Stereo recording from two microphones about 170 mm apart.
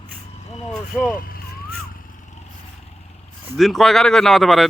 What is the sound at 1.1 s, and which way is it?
Vehicle, 60° left (ahead or behind).